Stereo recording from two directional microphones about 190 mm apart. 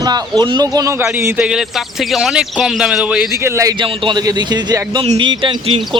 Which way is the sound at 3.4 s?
15° right (ahead or behind).